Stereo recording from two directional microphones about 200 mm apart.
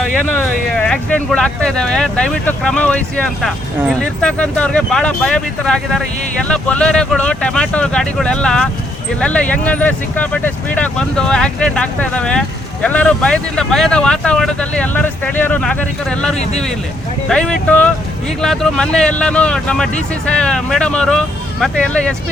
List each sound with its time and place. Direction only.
0.0 s speech: 5° left (ahead or behind)
16.4 s speech: 35° left (ahead or behind)
17.2 s speech: 5° left (ahead or behind)